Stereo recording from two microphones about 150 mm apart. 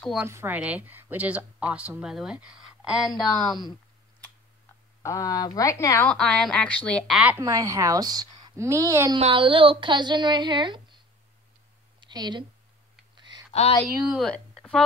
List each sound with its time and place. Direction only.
0.0 s speech: centre (ahead or behind)
0.3 s speech: 15° right (ahead or behind); by 3.6 s centre (ahead or behind)
5.0 s speech: 25° left (ahead or behind)
6.0 s speech: 5° left (ahead or behind)
7.3 s a woman's voice: 25° right (ahead or behind)
9.2 s a woman's voice: 35° right (ahead or behind)
12.0 s a sound: 30° right (ahead or behind)
13.5 s speech: 40° left (ahead or behind)
14.0 s speech: centre (ahead or behind)